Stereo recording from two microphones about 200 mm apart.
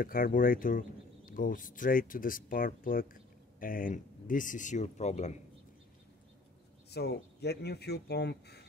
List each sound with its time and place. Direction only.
0.0 s speech: 45° left (ahead or behind)
6.9 s speech: 55° left (ahead or behind)